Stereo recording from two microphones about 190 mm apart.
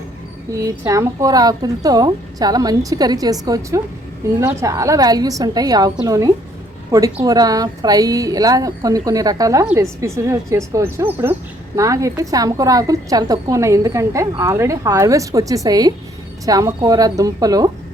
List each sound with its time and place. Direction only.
0.5 s a woman's voice: 15° right (ahead or behind)